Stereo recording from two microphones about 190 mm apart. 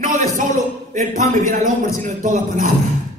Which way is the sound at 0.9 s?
40° right (ahead or behind).